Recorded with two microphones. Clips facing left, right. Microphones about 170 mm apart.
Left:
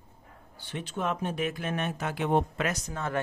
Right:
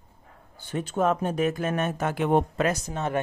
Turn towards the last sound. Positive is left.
turn(degrees=-20)  # may be behind; listen again after turning